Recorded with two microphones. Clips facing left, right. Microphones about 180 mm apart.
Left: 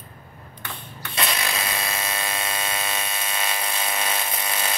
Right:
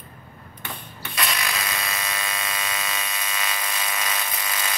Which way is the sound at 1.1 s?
30° left (ahead or behind).